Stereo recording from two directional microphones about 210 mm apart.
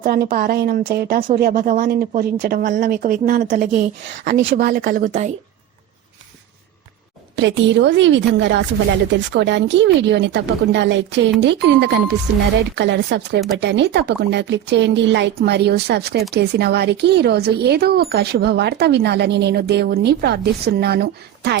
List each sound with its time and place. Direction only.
0.0 s speech: 45° right (ahead or behind)
4.3 s speech: 45° right (ahead or behind)
7.3 s speech: 60° right (ahead or behind)